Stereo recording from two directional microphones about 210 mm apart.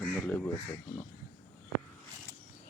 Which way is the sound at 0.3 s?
10° left (ahead or behind).